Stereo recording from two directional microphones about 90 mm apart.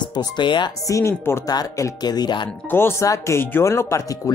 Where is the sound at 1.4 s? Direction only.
45° left (ahead or behind).